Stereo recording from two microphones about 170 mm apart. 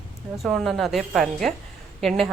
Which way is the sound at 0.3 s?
Centre (ahead or behind).